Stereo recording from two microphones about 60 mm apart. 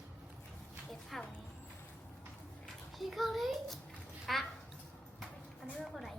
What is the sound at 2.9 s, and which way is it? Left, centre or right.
A child's voice, centre.